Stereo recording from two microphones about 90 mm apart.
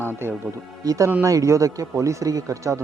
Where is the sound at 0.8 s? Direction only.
45° right (ahead or behind).